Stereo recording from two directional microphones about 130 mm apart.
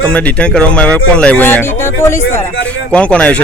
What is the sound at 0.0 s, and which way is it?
A man's voice, 10° left (ahead or behind).